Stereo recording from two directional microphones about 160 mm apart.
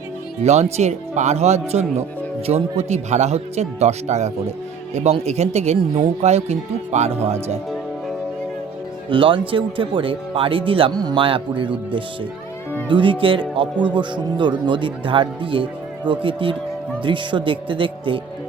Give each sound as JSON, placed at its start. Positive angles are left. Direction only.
{"t": 0.4, "sound": "speech", "side_deg": -45}
{"t": 9.0, "sound": "speech", "side_deg": -35}